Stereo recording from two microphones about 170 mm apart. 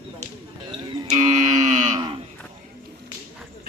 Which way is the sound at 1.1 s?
45° right (ahead or behind).